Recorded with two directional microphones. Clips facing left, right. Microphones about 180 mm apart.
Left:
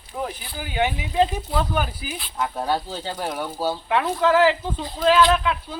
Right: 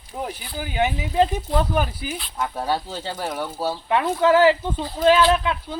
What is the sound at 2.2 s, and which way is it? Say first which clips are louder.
Speech: left 2 dB; centre (ahead or behind).